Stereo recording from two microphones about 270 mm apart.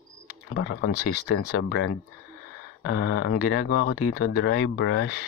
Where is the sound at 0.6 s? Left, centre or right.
Left.